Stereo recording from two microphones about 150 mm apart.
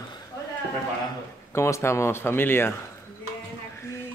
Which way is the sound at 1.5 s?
20° left (ahead or behind).